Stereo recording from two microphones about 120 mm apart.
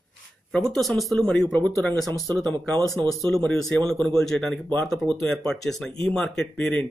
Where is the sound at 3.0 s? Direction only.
40° right (ahead or behind).